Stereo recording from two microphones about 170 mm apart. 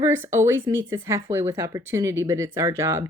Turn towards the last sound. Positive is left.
turn(degrees=-15)  # may be behind; listen again after turning